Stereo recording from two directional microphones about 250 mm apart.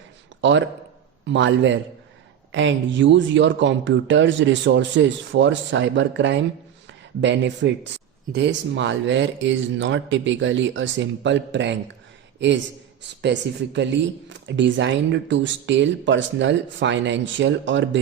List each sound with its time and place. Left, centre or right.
1.2 s speech: right